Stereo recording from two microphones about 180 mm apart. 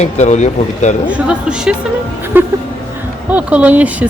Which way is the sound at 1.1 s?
5° right (ahead or behind).